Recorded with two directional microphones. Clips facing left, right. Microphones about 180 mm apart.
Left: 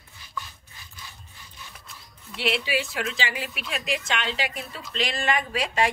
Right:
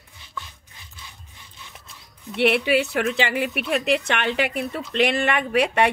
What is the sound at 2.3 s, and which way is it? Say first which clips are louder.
Speech: right 8 dB; 60° right (ahead or behind).